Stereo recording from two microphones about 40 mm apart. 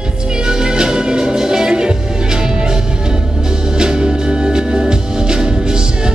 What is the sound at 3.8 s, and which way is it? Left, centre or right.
Music, centre.